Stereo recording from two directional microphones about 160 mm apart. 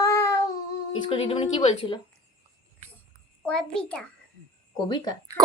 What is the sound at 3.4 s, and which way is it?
Speech, 5° left (ahead or behind).